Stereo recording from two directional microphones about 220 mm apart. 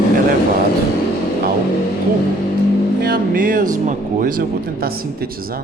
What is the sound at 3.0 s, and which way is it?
Speech, 40° right (ahead or behind).